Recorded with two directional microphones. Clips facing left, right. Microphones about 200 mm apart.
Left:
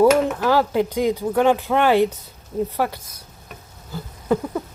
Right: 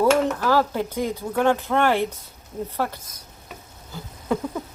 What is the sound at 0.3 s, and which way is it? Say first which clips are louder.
Speech: left 3 dB; 15° left (ahead or behind).